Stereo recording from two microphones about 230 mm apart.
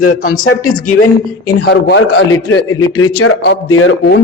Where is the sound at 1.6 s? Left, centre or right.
Left.